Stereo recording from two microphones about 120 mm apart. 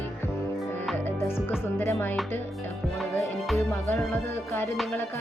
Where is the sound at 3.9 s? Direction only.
20° left (ahead or behind).